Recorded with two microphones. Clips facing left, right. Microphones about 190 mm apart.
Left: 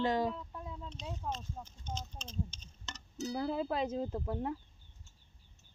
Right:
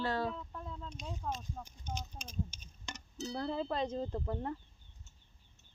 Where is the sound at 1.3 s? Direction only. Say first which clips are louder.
Even; 5° left (ahead or behind).